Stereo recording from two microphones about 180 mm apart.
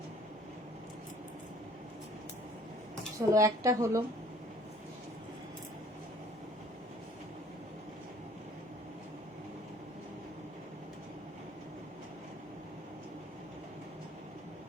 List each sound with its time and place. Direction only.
3.2 s a woman's voice: 15° right (ahead or behind)